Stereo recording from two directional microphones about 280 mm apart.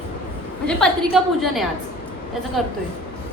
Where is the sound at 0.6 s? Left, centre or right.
Centre.